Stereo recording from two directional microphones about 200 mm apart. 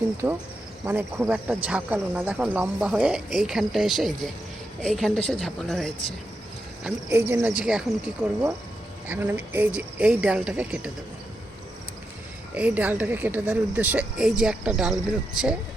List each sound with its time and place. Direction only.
0.2 s speech: 15° right (ahead or behind); by 5.9 s centre (ahead or behind)
6.8 s speech: 10° right (ahead or behind)
12.5 s speech: 5° right (ahead or behind)